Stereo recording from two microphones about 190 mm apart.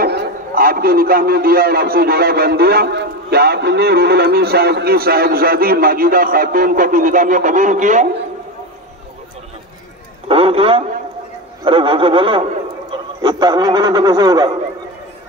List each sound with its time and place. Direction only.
0.0 s a man's voice: 55° right (ahead or behind)
10.2 s a sound: 30° right (ahead or behind)
11.6 s a man's voice: 25° right (ahead or behind)